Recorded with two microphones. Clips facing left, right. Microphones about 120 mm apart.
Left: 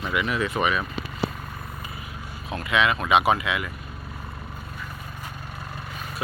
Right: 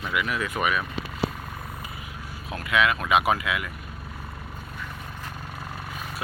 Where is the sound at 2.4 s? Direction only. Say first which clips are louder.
Left 1 dB; centre (ahead or behind).